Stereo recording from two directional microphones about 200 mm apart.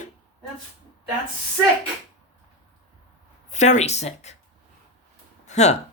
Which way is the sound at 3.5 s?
35° left (ahead or behind).